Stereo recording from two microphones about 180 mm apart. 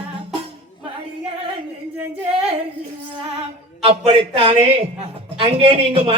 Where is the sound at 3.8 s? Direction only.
35° right (ahead or behind).